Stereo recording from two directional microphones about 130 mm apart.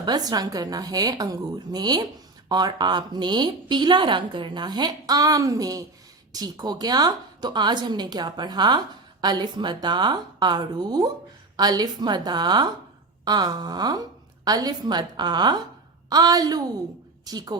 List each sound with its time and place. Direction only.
0.0 s a woman's voice: 30° right (ahead or behind)